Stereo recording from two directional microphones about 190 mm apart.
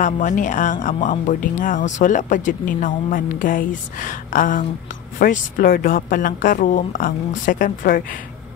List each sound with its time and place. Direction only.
0.0 s speech: 40° left (ahead or behind)